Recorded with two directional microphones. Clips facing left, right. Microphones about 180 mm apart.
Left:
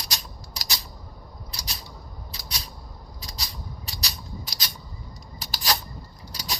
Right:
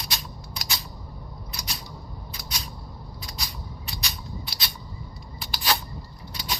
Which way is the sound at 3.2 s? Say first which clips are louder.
Even; 35° left (ahead or behind).